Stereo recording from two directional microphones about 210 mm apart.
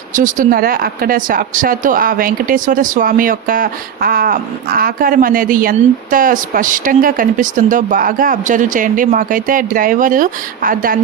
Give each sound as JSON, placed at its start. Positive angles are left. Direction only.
{"t": 0.1, "sound": "a woman's voice", "side_deg": -40}